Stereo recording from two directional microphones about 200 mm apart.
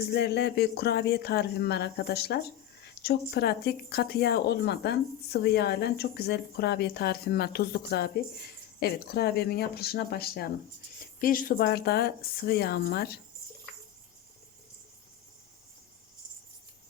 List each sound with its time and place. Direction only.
0.1 s speech: 55° left (ahead or behind)